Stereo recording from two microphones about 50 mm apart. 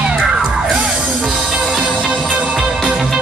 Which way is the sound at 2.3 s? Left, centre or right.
Right.